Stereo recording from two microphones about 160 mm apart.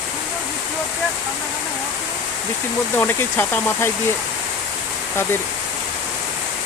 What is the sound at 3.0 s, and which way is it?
Speech, 10° left (ahead or behind).